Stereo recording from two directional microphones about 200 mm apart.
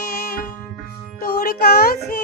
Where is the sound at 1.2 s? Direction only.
50° left (ahead or behind).